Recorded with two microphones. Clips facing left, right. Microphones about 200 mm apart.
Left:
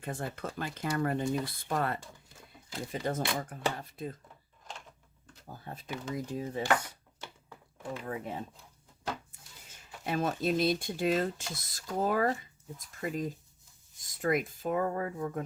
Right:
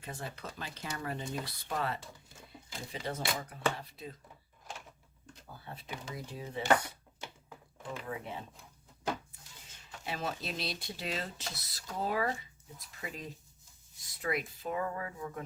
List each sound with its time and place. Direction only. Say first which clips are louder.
0.0 s speech: left 6 dB; 50° left (ahead or behind)
5.6 s speech: left 5 dB; 45° left (ahead or behind)
8.0 s speech: left 4 dB; 45° left (ahead or behind)
10.0 s speech: left 7 dB; 50° left (ahead or behind)